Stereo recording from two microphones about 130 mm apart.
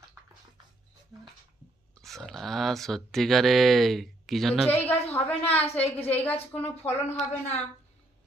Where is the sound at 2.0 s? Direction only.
Centre (ahead or behind).